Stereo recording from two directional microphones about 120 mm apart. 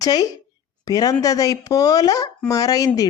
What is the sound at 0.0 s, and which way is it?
A woman's voice, 30° left (ahead or behind).